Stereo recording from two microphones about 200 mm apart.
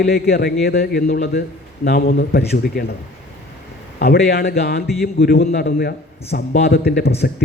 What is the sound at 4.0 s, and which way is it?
A man's voice, 50° left (ahead or behind).